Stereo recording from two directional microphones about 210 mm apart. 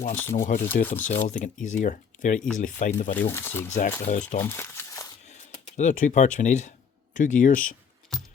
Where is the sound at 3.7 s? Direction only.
35° left (ahead or behind).